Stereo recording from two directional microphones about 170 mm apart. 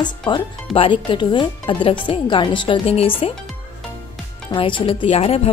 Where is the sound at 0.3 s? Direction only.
30° left (ahead or behind).